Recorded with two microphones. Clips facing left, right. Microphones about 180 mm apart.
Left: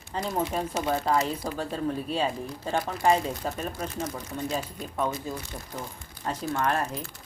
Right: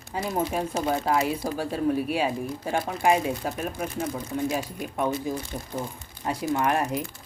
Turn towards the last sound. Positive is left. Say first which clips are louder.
# right 3 dB
turn(degrees=-15)  # may be behind; listen again after turning